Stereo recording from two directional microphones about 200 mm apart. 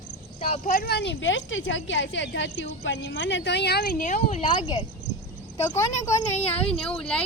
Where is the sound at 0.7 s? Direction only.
50° left (ahead or behind).